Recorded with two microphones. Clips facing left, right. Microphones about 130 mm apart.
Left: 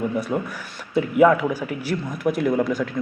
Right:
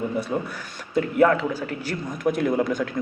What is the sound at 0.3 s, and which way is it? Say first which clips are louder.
A man's voice: left 2 dB; 10° left (ahead or behind).